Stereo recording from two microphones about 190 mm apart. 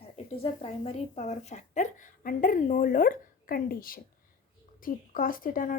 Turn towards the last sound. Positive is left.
turn(degrees=45)  # may be behind; listen again after turning